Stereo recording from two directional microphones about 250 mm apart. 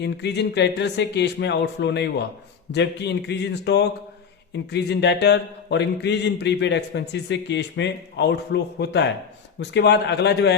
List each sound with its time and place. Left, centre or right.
0.0 s speech: left